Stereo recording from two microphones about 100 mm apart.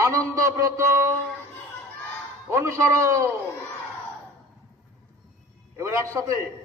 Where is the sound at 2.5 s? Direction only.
30° right (ahead or behind).